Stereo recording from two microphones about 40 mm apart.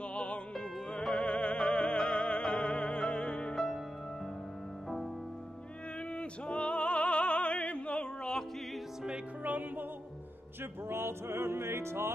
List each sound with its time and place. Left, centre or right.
0.1 s music: left
3.5 s music: centre
6.1 s opera: left
9.4 s music: right
10.9 s music: right